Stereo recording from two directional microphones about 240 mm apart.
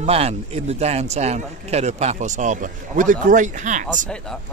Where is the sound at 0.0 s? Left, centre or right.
Right.